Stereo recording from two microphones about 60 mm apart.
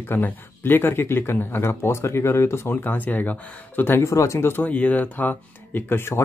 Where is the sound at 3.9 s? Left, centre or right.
Left.